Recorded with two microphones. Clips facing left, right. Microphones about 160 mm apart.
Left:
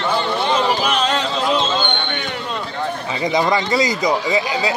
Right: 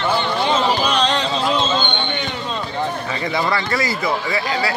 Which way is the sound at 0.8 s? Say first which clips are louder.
Even; 5° left (ahead or behind).